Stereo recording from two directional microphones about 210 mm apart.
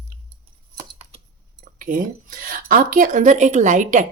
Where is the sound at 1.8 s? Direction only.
40° right (ahead or behind).